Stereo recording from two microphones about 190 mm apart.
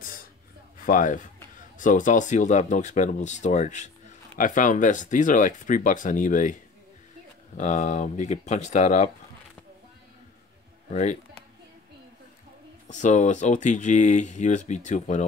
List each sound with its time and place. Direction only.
0.7 s speech: 45° left (ahead or behind)
10.9 s speech: 35° left (ahead or behind)
12.8 s speech: 40° left (ahead or behind)